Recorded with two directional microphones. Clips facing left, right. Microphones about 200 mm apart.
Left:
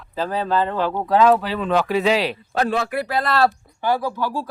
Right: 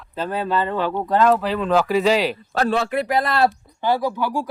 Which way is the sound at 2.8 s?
20° right (ahead or behind).